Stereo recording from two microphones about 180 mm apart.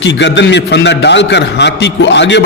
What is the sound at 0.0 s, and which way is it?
A man's voice, 80° left.